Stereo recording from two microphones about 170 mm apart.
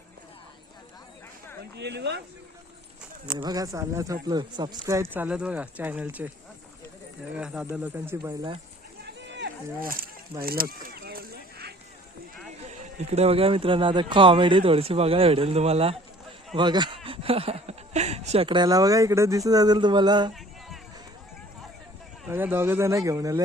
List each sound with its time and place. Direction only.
1.7 s speech: 80° right
3.3 s speech: 25° right (ahead or behind)
7.3 s speech: 5° right (ahead or behind)
9.0 s a sound: 85° right
12.6 s speech: 40° right (ahead or behind); by 20.3 s 25° right (ahead or behind)
22.3 s speech: 15° right (ahead or behind)